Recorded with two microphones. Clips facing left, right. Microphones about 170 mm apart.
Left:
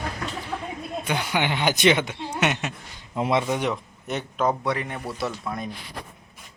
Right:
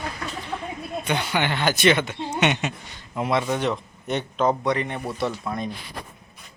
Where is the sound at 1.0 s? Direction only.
10° left (ahead or behind).